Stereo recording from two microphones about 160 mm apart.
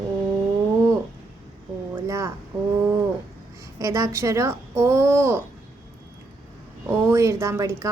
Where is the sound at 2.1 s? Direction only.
20° right (ahead or behind).